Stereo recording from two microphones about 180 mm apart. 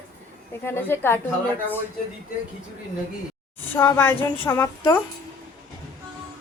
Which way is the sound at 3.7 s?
15° left (ahead or behind).